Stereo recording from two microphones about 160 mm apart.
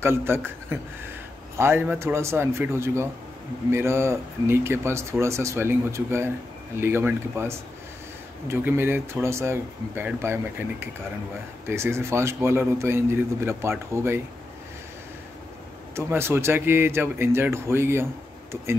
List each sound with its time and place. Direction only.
0.0 s a man's voice: 15° right (ahead or behind)
1.6 s a man's voice: 15° right (ahead or behind)
16.0 s a man's voice: 15° right (ahead or behind)